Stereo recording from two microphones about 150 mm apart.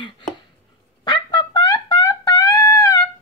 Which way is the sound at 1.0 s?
30° left (ahead or behind).